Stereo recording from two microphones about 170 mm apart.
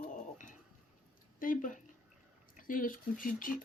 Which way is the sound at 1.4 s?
50° left (ahead or behind).